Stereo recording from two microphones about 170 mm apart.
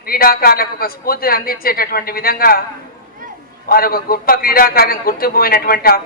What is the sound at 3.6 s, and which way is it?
A man's voice, 60° left (ahead or behind).